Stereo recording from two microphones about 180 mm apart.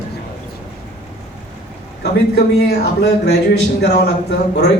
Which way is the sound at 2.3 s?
70° left (ahead or behind).